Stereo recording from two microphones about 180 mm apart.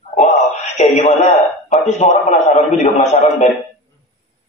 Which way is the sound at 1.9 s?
40° left (ahead or behind).